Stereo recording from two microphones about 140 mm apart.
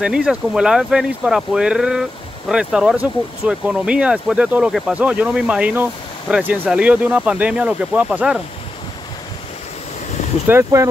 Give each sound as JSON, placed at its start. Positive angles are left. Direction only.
{"t": 0.0, "sound": "speech", "side_deg": -5}
{"t": 10.5, "sound": "speech", "side_deg": -20}